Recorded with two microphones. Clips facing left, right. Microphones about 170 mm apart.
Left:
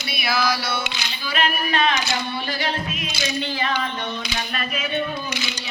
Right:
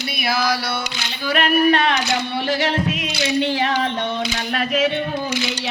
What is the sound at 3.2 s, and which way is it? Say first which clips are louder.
Speech: right 6 dB; 75° right (ahead or behind).